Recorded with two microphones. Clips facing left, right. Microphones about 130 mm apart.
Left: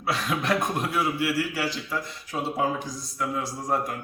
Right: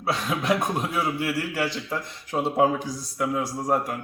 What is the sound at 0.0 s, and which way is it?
Speech, 20° right (ahead or behind).